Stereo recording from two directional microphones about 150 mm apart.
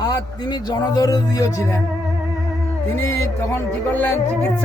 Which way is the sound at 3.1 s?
15° left (ahead or behind).